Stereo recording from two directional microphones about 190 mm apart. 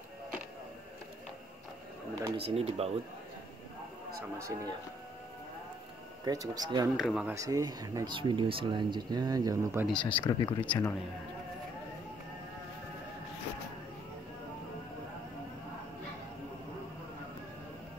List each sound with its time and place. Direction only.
2.3 s speech: 30° right (ahead or behind)
4.4 s speech: 15° right (ahead or behind)
6.2 s speech: 20° right (ahead or behind)
7.0 s speech: centre (ahead or behind)
7.3 s speech: 15° right (ahead or behind)
9.9 s speech: 25° left (ahead or behind)